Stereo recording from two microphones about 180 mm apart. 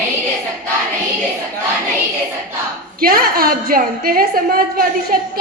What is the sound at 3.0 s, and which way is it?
A woman's voice, 55° right (ahead or behind).